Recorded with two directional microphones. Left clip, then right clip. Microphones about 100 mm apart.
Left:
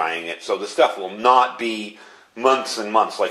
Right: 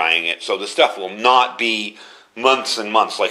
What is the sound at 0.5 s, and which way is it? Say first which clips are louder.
A man's voice: even; 5° right (ahead or behind).